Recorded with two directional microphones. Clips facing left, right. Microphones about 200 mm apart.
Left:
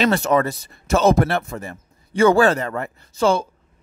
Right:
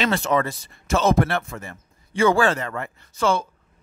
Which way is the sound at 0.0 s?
40° left (ahead or behind).